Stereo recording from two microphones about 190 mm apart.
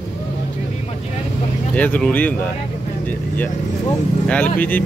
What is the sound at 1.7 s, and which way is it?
Speech, 10° left (ahead or behind).